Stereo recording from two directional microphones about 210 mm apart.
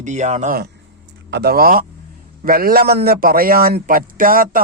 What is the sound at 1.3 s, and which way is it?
A man's voice, 50° right (ahead or behind).